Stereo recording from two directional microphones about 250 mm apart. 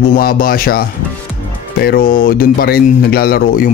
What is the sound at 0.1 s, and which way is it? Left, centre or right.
Speech, left.